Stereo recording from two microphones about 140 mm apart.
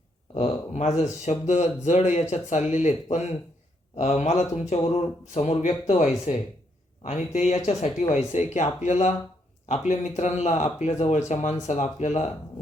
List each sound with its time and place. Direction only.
0.3 s a sound: 55° left (ahead or behind)
1.2 s speech: 55° left (ahead or behind)
7.0 s speech: 55° left (ahead or behind)